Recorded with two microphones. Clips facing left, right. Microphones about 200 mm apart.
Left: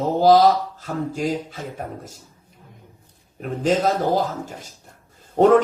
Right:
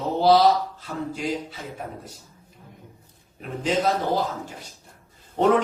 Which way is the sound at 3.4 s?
45° left (ahead or behind).